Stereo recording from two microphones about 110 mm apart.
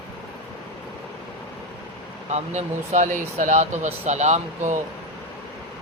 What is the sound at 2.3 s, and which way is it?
Speech, 90° right.